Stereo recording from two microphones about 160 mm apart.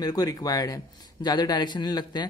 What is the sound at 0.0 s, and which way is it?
Speech, 25° left (ahead or behind).